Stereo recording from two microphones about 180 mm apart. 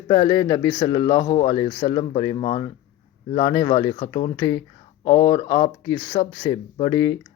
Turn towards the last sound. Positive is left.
turn(degrees=20)  # may be behind; listen again after turning